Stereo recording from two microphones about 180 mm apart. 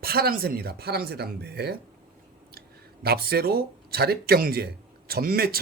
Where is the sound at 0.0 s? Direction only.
55° right (ahead or behind).